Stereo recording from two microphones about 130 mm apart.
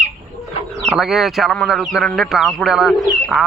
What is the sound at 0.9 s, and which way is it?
Speech, centre (ahead or behind).